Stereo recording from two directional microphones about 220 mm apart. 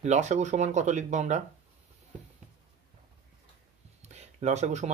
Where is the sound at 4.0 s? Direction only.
30° right (ahead or behind).